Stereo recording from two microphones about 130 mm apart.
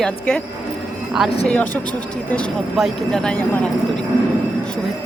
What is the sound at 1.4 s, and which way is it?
Speech, 10° left (ahead or behind).